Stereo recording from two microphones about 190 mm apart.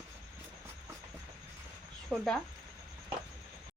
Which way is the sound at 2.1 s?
Centre (ahead or behind).